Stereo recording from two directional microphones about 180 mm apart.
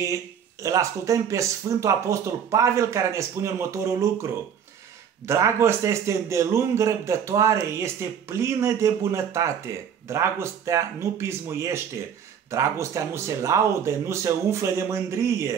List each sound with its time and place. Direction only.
0.0 s speech: 15° right (ahead or behind)